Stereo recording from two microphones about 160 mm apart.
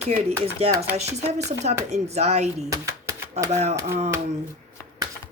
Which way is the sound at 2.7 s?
20° right (ahead or behind).